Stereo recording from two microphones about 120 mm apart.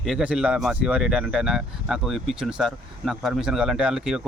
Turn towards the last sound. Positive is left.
turn(degrees=-5)  # may be behind; listen again after turning